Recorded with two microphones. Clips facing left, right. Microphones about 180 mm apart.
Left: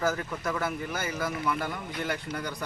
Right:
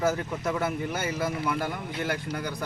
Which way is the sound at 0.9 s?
25° right (ahead or behind).